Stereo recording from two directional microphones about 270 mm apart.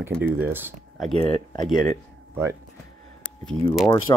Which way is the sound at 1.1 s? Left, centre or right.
Centre.